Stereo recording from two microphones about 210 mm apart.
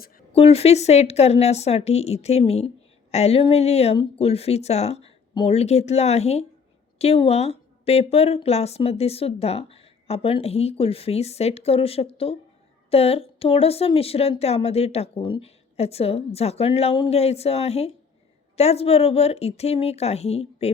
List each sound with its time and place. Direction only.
0.3 s a woman's voice: 30° left (ahead or behind)